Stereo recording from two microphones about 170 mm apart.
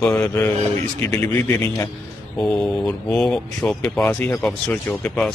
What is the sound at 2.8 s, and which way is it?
Speech, 5° left (ahead or behind).